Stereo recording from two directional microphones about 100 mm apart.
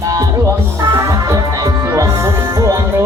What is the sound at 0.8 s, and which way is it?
Music, 30° right (ahead or behind).